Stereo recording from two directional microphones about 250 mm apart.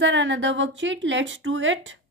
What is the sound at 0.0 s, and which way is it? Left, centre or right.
Speech, right.